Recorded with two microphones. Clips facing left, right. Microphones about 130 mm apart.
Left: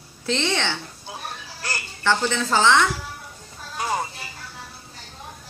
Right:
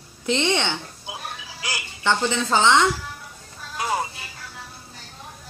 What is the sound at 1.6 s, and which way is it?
A woman's voice, 15° right (ahead or behind).